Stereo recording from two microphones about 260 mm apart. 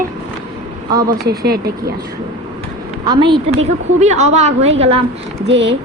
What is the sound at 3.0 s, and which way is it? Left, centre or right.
A woman's voice, centre.